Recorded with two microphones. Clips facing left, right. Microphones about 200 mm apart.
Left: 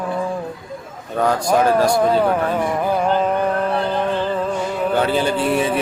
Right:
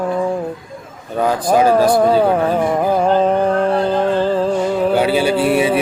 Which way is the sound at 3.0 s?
30° right (ahead or behind).